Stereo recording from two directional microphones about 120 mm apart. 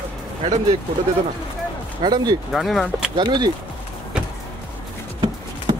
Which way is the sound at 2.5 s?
Centre (ahead or behind).